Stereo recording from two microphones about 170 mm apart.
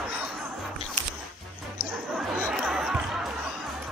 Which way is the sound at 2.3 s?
5° right (ahead or behind).